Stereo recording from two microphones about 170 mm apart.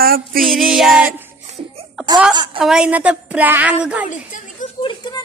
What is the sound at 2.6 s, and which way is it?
Music, 5° right (ahead or behind).